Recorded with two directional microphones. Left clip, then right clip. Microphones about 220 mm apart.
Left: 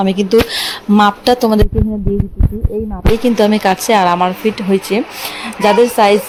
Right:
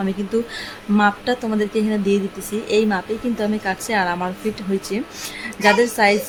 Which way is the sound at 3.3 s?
25° left (ahead or behind).